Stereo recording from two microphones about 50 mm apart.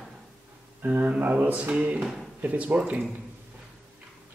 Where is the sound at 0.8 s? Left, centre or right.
Right.